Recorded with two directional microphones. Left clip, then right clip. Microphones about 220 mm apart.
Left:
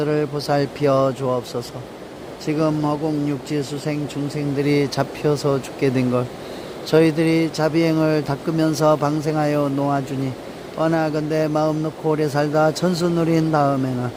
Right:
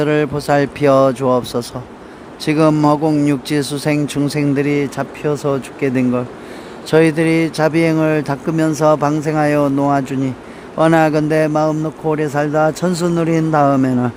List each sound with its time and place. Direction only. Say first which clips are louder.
0.0 s speech: right 5 dB; 15° right (ahead or behind)